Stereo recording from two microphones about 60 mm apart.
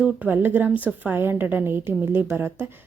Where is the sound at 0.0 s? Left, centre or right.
Right.